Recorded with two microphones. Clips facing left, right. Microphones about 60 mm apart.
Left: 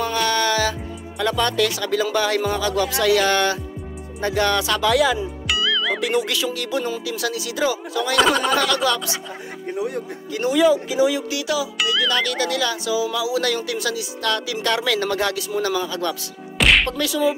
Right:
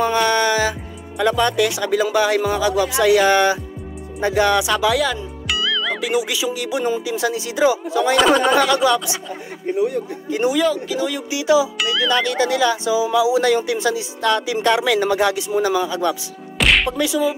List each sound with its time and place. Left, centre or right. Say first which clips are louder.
0.0 s speech: right 4 dB; centre
4.2 s music: right 4 dB; centre
5.0 s speech: left 2 dB; centre; by 8.2 s right
8.2 s speech: right 1 dB; centre
8.5 s speech: right 4 dB; right
10.5 s speech: left 2 dB; centre
11.2 s speech: right 7 dB; right
11.8 s music: right 1 dB; centre
12.1 s speech: right 4 dB; right
16.5 s music: even; centre
16.9 s music: right 3 dB; centre